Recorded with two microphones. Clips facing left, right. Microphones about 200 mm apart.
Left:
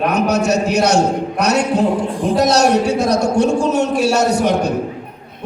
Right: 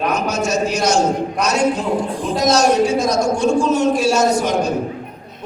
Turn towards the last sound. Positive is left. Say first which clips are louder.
# left 1 dB
turn(degrees=65)  # may be behind; listen again after turning